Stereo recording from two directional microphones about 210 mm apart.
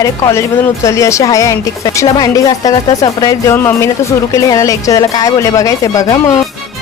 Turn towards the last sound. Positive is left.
turn(degrees=15)  # may be behind; listen again after turning